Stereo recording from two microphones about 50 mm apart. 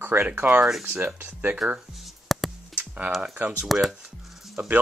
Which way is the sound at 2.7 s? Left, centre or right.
Right.